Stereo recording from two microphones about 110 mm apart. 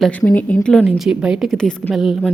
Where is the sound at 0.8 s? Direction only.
5° right (ahead or behind).